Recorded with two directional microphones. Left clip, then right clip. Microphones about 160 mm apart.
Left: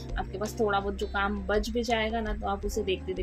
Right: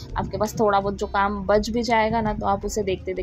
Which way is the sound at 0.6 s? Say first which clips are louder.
Right 7 dB; 30° right (ahead or behind).